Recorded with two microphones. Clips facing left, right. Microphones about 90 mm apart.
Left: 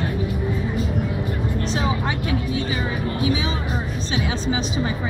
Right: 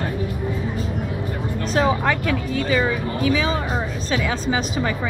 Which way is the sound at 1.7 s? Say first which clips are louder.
Right 8 dB; 45° right (ahead or behind).